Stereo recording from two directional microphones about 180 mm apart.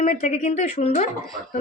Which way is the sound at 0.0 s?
40° left (ahead or behind).